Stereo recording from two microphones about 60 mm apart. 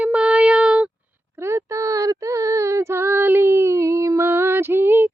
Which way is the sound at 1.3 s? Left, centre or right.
Right.